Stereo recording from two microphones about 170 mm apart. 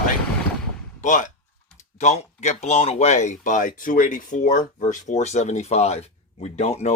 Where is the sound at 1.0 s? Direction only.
50° left (ahead or behind).